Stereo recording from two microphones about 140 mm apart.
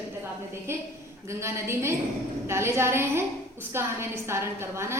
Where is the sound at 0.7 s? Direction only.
20° right (ahead or behind).